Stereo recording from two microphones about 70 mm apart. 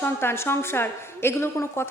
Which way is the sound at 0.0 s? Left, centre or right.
Left.